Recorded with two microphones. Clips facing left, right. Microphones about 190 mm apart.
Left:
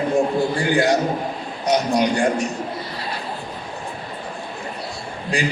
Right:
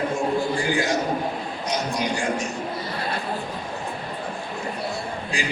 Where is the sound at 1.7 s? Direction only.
65° left (ahead or behind).